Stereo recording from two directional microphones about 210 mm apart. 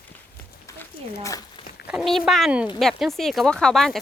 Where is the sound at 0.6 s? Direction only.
15° left (ahead or behind).